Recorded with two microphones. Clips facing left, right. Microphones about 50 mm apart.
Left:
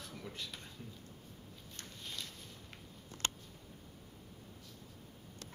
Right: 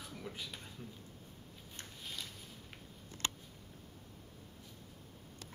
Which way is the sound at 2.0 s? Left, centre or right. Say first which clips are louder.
Even; centre.